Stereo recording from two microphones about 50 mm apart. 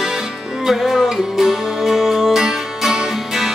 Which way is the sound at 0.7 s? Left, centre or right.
Centre.